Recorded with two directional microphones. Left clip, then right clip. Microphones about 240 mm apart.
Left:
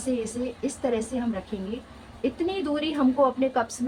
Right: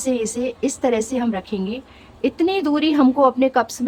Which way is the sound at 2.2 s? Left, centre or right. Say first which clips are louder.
Right 8 dB; right.